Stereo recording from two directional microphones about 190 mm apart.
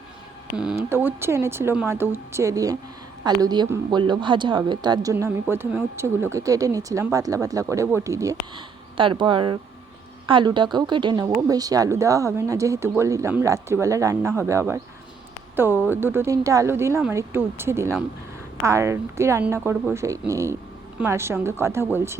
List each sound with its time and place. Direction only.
0.5 s a woman's voice: 5° right (ahead or behind); by 5.1 s 20° right (ahead or behind)
5.1 s speech: 10° right (ahead or behind)